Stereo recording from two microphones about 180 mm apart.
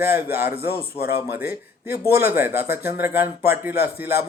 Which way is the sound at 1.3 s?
15° right (ahead or behind).